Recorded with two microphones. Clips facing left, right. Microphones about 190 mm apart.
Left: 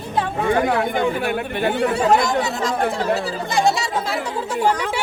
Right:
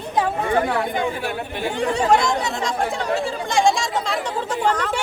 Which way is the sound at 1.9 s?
5° left (ahead or behind).